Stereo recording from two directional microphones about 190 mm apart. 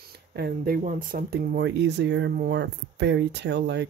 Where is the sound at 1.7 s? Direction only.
65° right (ahead or behind).